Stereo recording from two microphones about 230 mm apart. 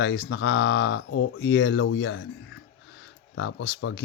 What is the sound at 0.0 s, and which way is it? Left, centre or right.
Speech, left.